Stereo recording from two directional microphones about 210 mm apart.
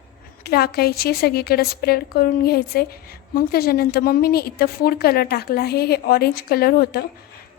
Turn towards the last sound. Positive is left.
turn(degrees=45)  # may be behind; listen again after turning